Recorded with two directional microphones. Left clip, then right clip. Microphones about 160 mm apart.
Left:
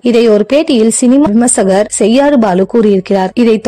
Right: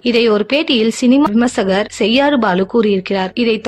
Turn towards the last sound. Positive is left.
turn(degrees=55)  # may be behind; listen again after turning